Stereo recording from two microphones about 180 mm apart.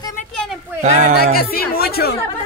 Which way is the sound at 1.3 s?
55° left (ahead or behind).